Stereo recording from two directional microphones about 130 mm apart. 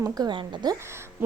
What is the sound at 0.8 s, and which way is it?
Speech, 20° right (ahead or behind).